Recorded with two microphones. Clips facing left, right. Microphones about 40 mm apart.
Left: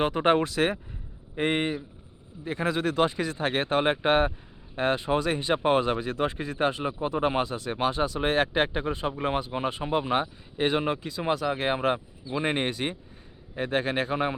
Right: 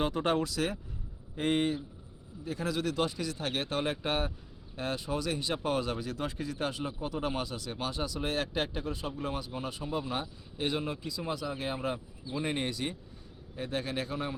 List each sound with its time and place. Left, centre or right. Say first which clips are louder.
0.0 s speech: left 7 dB; left
1.4 s a man's voice: left 3 dB; left